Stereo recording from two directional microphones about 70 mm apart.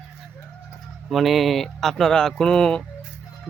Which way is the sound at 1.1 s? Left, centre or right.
Centre.